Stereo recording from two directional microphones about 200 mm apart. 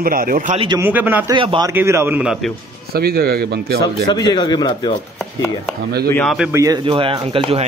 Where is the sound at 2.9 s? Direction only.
50° right (ahead or behind).